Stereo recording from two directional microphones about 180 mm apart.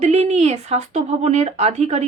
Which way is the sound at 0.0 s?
35° right (ahead or behind).